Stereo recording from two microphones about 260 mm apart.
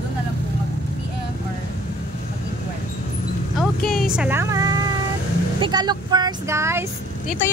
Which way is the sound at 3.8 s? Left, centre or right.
Centre.